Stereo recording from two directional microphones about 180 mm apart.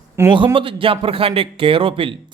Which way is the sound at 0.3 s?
30° right (ahead or behind).